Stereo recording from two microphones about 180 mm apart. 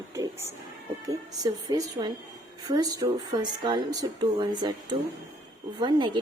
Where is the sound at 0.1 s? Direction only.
15° right (ahead or behind).